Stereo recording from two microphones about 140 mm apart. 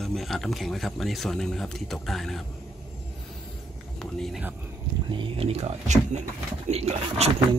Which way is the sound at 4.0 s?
Centre (ahead or behind).